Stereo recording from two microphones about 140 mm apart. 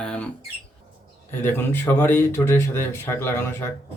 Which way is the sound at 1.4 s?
15° left (ahead or behind).